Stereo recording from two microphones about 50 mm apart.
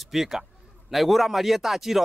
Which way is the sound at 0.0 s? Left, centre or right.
Centre.